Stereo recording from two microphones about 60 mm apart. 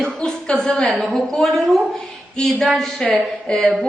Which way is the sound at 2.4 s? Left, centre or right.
Centre.